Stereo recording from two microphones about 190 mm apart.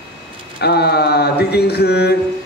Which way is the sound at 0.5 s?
60° left (ahead or behind).